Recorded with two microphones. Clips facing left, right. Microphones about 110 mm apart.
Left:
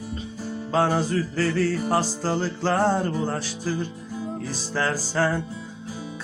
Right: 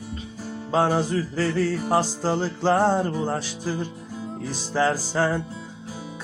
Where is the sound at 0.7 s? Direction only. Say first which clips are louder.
Right 1 dB; 15° right (ahead or behind).